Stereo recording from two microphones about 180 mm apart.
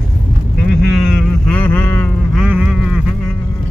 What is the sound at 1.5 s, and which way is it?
Boat, 10° left (ahead or behind).